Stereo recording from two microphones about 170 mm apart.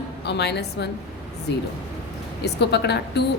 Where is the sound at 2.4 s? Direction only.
75° left (ahead or behind).